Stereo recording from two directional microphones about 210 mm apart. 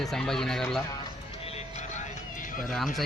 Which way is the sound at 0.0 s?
Centre (ahead or behind).